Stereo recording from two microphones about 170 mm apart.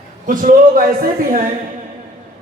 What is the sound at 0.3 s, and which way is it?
A man's voice, 55° right (ahead or behind).